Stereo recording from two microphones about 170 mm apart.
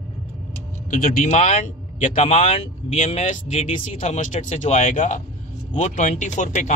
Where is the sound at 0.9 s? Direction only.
50° left (ahead or behind).